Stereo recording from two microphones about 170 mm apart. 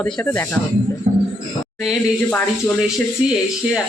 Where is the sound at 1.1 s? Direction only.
40° right (ahead or behind).